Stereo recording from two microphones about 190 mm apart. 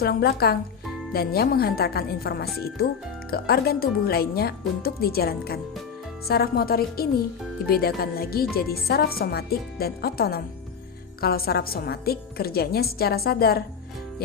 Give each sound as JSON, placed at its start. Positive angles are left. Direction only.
{"t": 0.0, "sound": "a woman's voice", "side_deg": 55}